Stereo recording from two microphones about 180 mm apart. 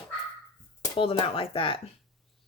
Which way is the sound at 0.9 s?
30° left (ahead or behind).